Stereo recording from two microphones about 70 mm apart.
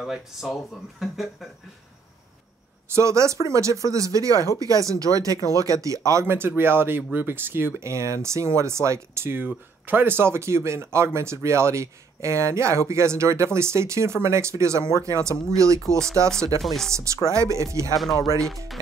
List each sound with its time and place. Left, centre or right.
0.0 s speech: centre
2.9 s speech: right
6.2 s speech: right
16.6 s speech: centre
16.9 s speech: right
17.9 s speech: centre